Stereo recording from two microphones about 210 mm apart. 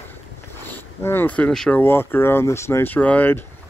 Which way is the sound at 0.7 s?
10° left (ahead or behind).